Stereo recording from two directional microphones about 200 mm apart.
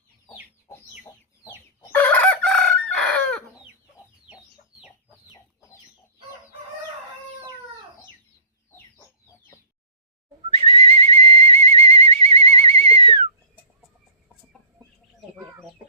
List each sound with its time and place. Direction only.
1.5 s chicken: 10° left (ahead or behind)
10.6 s whistle: 30° right (ahead or behind)